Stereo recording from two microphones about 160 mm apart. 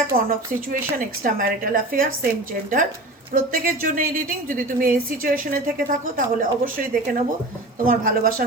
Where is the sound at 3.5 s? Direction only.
60° right (ahead or behind).